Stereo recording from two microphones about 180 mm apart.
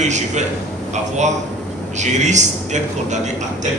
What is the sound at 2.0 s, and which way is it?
A man's voice, 40° right (ahead or behind).